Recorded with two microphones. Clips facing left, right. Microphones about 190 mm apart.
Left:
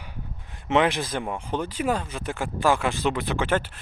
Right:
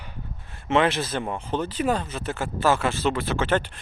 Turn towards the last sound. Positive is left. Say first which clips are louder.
# right 1 dB
turn(degrees=5)  # may be behind; listen again after turning